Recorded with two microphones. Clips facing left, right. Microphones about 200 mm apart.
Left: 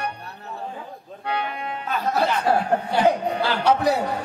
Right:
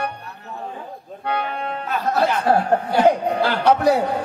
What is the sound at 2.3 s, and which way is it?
A man's voice, 55° right (ahead or behind).